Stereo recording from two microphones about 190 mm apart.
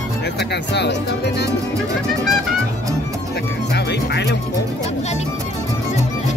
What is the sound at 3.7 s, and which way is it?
Music, 65° left (ahead or behind).